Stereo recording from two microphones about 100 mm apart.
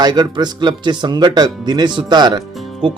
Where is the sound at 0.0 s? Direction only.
45° right (ahead or behind).